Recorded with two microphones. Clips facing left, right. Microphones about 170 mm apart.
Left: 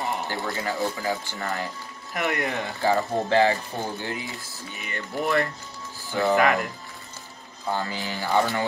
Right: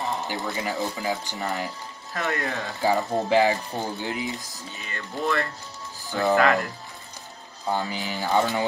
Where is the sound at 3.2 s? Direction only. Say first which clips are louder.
Even; 15° right (ahead or behind).